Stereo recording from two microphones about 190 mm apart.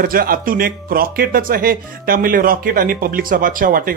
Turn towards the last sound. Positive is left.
turn(degrees=-50)  # may be behind; listen again after turning